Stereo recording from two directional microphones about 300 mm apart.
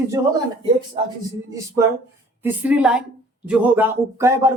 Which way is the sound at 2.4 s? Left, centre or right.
Centre.